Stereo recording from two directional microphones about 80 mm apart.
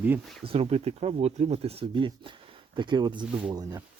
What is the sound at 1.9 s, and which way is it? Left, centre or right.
Speech, right.